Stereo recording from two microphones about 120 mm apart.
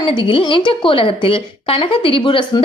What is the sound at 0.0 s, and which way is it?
A woman's voice, 45° left (ahead or behind).